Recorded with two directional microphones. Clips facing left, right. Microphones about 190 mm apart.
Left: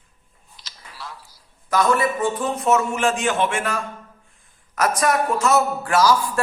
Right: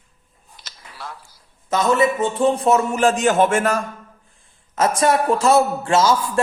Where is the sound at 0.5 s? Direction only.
55° right (ahead or behind).